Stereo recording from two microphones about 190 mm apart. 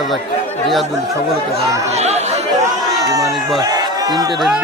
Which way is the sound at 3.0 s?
20° right (ahead or behind).